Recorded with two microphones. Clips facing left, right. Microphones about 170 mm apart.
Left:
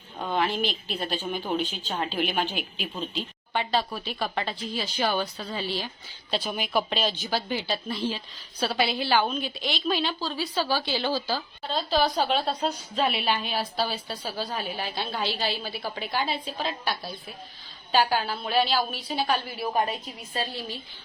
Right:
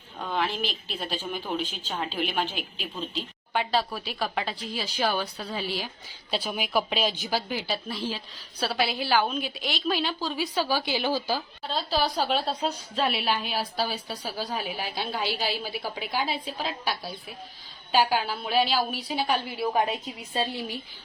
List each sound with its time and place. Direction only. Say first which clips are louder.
0.3 s a woman's voice: left 3 dB; centre (ahead or behind); by 20.7 s 20° right (ahead or behind)